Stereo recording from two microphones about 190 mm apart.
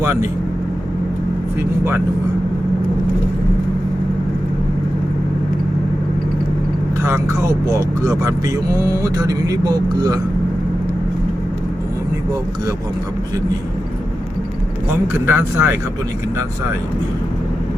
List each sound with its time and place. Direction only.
0.0 s speech: 15° right (ahead or behind)
7.0 s speech: 15° right (ahead or behind)
15.0 s speech: 10° right (ahead or behind)